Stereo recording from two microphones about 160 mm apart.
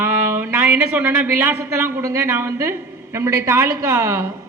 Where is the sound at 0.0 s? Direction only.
15° right (ahead or behind).